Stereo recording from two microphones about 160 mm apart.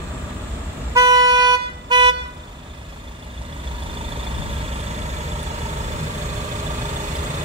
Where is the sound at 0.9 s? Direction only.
20° right (ahead or behind).